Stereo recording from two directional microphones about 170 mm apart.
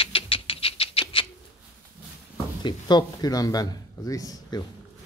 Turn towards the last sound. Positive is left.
turn(degrees=20)  # may be behind; listen again after turning